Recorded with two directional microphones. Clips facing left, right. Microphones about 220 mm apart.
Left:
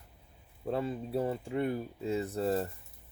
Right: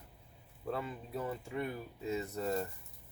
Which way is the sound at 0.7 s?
30° left (ahead or behind).